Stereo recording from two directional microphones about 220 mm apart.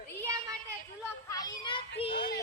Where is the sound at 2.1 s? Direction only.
50° left (ahead or behind).